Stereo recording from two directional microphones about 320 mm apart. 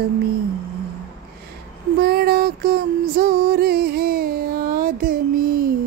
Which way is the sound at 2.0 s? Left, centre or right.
Right.